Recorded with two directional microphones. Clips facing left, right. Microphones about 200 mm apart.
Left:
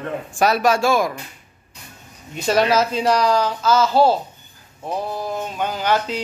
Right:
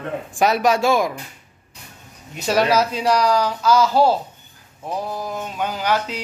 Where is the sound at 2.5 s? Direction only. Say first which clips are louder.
Left 1 dB; 10° right (ahead or behind).